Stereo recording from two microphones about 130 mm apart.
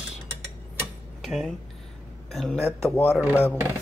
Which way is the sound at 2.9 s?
15° left (ahead or behind).